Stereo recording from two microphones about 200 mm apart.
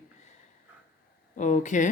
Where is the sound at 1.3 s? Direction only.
40° left (ahead or behind).